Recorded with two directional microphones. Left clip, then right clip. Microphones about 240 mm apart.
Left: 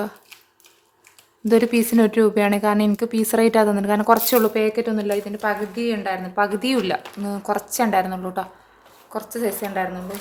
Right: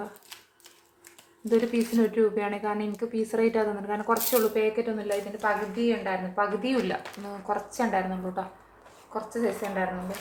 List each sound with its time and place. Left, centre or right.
1.5 s speech: left